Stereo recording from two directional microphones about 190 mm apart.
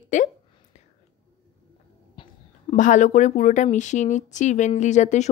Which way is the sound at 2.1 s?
25° left (ahead or behind).